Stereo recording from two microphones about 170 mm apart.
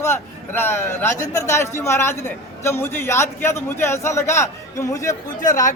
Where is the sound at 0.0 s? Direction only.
15° left (ahead or behind).